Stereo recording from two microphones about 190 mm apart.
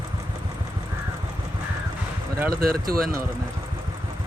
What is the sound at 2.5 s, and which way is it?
Speech, 50° right (ahead or behind).